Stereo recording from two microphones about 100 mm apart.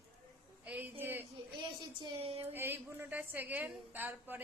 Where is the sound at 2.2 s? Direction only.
80° right.